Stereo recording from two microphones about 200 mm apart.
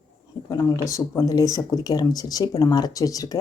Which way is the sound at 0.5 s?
15° left (ahead or behind).